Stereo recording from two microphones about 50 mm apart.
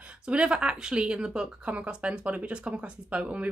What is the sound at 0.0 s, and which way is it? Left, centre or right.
Speech, right.